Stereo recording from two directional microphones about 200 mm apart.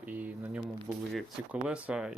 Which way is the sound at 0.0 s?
10° right (ahead or behind).